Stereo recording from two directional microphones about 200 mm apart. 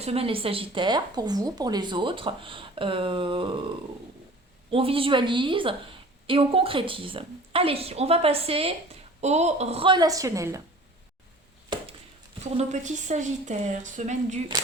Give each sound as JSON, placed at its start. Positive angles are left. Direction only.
{"t": 0.0, "sound": "a woman's voice", "side_deg": -30}
{"t": 4.7, "sound": "a woman's voice", "side_deg": -30}
{"t": 11.7, "sound": "a sound", "side_deg": -20}
{"t": 12.4, "sound": "speech", "side_deg": -35}